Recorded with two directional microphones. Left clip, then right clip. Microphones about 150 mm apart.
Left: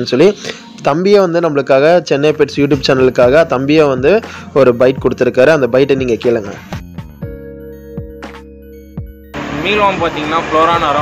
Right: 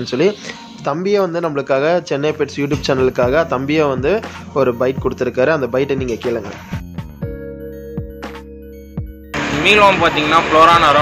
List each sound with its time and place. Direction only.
0.0 s a man's voice: 30° left (ahead or behind)
9.6 s speech: 5° left (ahead or behind)